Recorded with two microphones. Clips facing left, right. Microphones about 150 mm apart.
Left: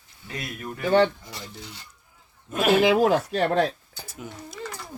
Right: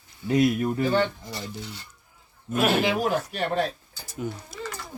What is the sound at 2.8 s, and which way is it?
Speech, 90° left.